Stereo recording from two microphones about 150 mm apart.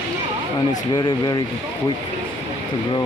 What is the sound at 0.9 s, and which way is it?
Speech, 30° left (ahead or behind).